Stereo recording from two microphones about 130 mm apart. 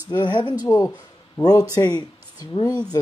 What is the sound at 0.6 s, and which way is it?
Speech, 25° left (ahead or behind).